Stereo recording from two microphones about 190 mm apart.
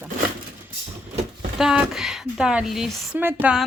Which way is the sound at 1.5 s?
Centre (ahead or behind).